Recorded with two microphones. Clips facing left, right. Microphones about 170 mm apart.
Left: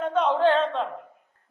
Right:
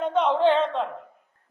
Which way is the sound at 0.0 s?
15° right (ahead or behind).